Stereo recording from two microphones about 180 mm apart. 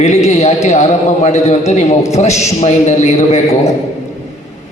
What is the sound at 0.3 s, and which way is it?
A man's voice, 35° left (ahead or behind).